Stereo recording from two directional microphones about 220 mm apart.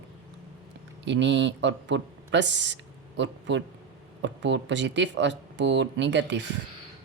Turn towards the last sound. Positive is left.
turn(degrees=-55)  # may be behind; listen again after turning